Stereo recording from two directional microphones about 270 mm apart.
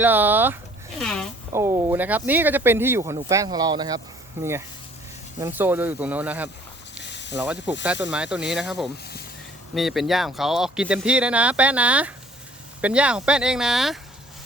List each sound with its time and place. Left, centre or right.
0.0 s speech: centre
1.5 s speech: centre
7.0 s snake: left
7.3 s speech: centre